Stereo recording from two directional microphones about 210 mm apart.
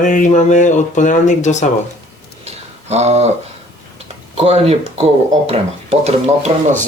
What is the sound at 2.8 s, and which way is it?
Speech, 30° right (ahead or behind).